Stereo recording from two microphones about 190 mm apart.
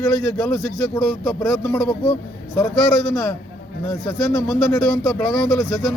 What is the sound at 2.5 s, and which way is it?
A man's voice, 15° left (ahead or behind).